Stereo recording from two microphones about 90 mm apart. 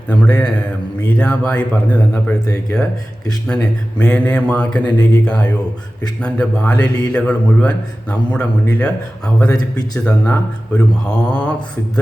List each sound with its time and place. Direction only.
0.1 s mantra: 15° left (ahead or behind)
9.5 s speech: 45° left (ahead or behind)
10.0 s mantra: 10° left (ahead or behind)